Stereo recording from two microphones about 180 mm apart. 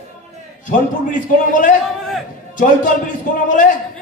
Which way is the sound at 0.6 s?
45° left (ahead or behind).